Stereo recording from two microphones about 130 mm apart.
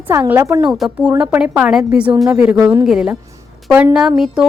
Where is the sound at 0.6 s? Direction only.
5° right (ahead or behind).